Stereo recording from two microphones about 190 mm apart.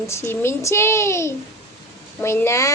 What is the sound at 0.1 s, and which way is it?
Speech, 15° left (ahead or behind).